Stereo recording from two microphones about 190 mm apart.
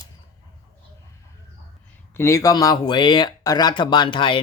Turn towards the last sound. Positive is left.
turn(degrees=25)  # may be behind; listen again after turning